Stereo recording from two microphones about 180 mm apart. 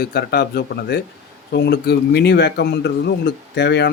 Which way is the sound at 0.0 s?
60° left (ahead or behind).